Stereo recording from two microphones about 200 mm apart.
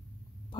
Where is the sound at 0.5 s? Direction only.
25° left (ahead or behind).